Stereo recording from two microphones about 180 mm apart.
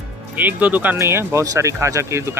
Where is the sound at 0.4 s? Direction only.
10° right (ahead or behind).